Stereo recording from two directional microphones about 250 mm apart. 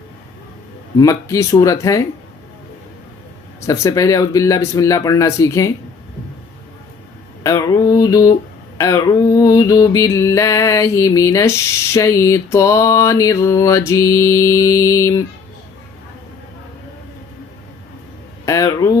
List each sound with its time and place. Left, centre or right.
0.9 s mantra: centre
3.7 s mantra: centre
7.4 s mantra: centre
18.4 s a sound: centre